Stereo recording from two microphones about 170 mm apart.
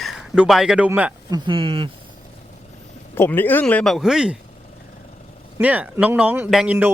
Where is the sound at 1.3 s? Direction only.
25° right (ahead or behind).